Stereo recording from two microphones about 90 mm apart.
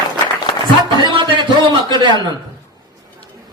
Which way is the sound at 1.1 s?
60° right (ahead or behind).